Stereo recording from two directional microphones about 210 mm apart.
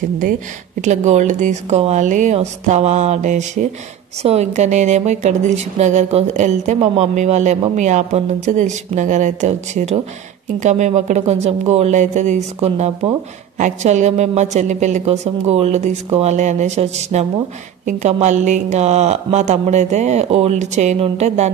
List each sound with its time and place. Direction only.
0.2 s speech: 40° right (ahead or behind)